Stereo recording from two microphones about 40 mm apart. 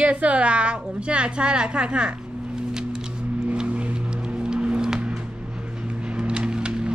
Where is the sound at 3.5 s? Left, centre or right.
Right.